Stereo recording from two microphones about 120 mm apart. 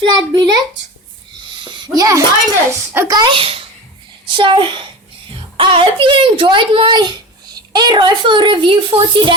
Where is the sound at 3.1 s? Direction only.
40° right (ahead or behind).